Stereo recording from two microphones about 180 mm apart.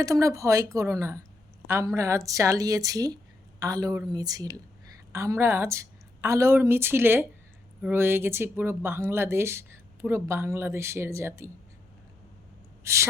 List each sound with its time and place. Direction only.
0.0 s speech: 15° right (ahead or behind)
12.8 s speech: 15° right (ahead or behind)